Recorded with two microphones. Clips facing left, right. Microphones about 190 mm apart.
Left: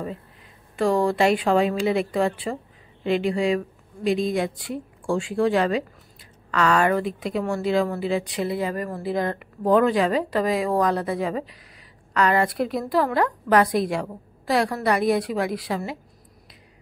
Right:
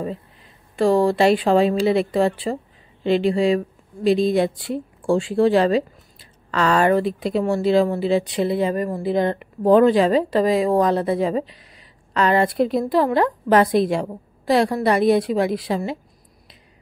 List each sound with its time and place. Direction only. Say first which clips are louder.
0.7 s a woman's voice: right 4 dB; 30° right (ahead or behind)